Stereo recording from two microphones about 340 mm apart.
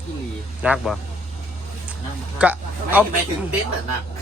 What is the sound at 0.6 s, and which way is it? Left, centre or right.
Speech, centre.